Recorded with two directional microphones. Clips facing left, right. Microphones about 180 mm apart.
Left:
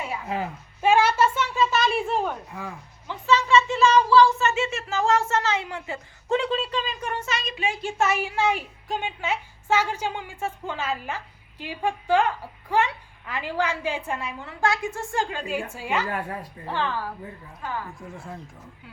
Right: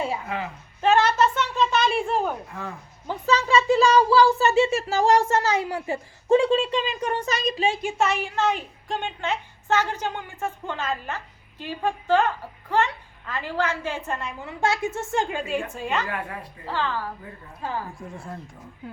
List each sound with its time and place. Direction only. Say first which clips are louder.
0.3 s a woman's voice: left 2 dB; 35° left (ahead or behind)
0.8 s a sound: even; 10° left (ahead or behind)
3.1 s speech: left 1 dB; 40° right (ahead or behind)
7.9 s a woman's voice: even; 5° left (ahead or behind)
14.4 s speech: right 1 dB; 25° right (ahead or behind)
15.7 s a woman's voice: even; 10° left (ahead or behind)
17.6 s speech: right 2 dB; 35° right (ahead or behind)